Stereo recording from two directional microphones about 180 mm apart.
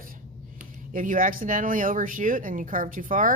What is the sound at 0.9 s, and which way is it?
Speech, 45° right (ahead or behind).